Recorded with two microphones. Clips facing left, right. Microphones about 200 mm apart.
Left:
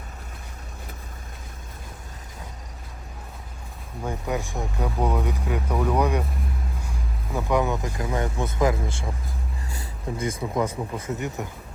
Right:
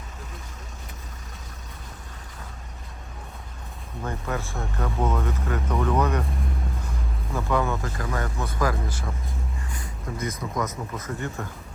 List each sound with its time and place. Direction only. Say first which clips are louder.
4.0 s speech: left 2 dB; 15° left (ahead or behind)
7.3 s speech: left 2 dB; 15° left (ahead or behind)
10.2 s speech: left 3 dB; 30° left (ahead or behind)
11.4 s speech: left 2 dB; 20° left (ahead or behind)